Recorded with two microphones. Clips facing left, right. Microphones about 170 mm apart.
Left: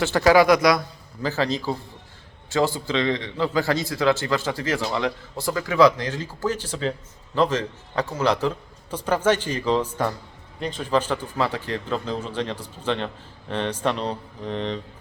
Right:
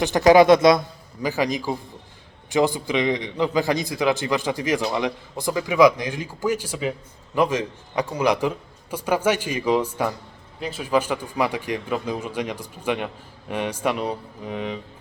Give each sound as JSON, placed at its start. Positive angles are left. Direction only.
{"t": 0.0, "sound": "a man's voice", "side_deg": -20}
{"t": 1.2, "sound": "a man's voice", "side_deg": -15}